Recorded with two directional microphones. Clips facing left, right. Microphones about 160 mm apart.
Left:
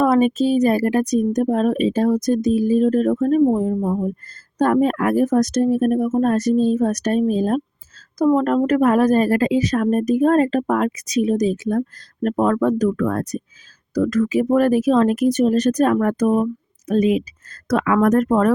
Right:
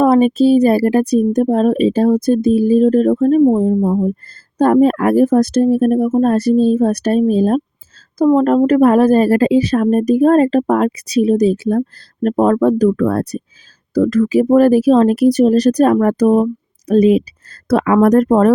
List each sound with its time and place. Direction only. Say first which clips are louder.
0.0 s a woman's voice: right 5 dB; 30° right (ahead or behind)